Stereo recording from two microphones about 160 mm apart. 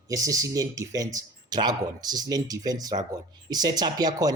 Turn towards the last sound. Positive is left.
turn(degrees=-25)  # may be behind; listen again after turning